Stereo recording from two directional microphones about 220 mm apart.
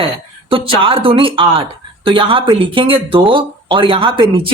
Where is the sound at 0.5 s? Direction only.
25° right (ahead or behind).